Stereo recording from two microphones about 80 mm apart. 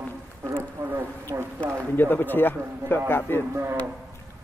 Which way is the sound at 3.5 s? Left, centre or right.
Right.